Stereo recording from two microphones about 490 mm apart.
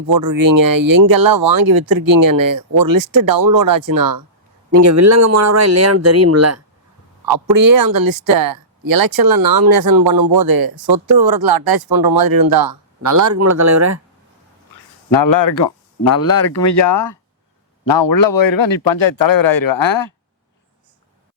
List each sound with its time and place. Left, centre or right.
0.1 s speech: right
7.3 s speech: right
15.5 s speech: left